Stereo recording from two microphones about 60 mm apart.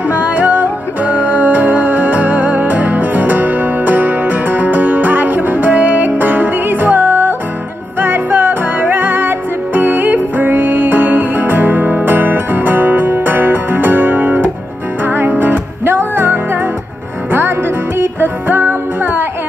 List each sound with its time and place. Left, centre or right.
0.1 s music: right